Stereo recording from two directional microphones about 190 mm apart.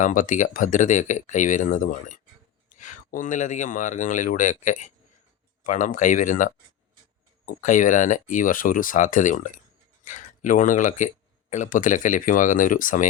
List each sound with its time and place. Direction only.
0.0 s speech: 45° left (ahead or behind)